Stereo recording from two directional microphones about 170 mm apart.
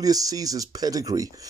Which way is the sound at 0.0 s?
20° right (ahead or behind).